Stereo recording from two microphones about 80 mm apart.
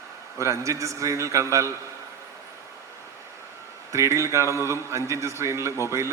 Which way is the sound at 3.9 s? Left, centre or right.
Right.